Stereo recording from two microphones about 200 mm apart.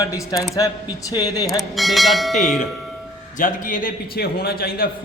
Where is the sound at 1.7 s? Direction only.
Centre (ahead or behind).